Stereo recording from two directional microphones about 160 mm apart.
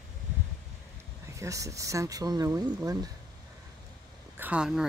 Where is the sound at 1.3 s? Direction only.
20° right (ahead or behind).